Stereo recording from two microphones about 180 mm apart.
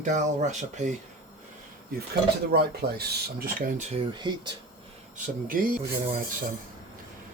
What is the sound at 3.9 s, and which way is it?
Speech, 25° right (ahead or behind).